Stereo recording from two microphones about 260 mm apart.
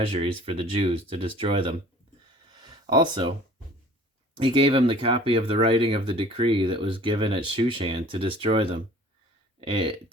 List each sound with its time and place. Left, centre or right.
0.1 s speech: right
2.5 s a sound: centre
4.4 s speech: right